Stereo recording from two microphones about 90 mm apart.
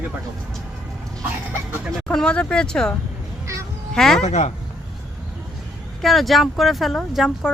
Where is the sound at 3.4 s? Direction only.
35° right (ahead or behind).